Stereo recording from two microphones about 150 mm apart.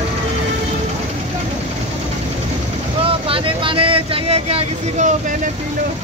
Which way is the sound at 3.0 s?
40° right (ahead or behind).